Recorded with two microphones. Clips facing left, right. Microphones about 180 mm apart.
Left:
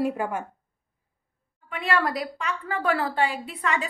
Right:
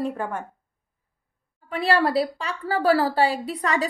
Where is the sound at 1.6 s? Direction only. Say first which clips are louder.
Right 4 dB; 35° right (ahead or behind).